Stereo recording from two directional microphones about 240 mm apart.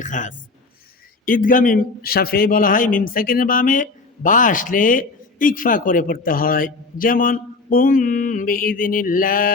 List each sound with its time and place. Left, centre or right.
0.0 s a man's voice: left